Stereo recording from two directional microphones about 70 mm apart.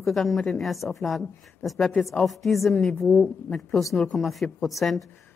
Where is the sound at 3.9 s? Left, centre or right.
Centre.